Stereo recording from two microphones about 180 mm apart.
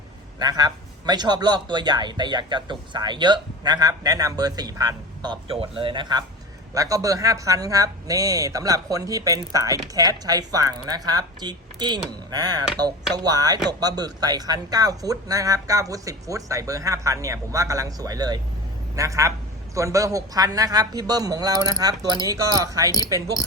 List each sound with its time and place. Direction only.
0.3 s a man's voice: 20° right (ahead or behind)